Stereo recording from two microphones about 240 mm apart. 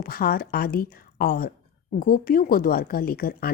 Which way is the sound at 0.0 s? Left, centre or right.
Left.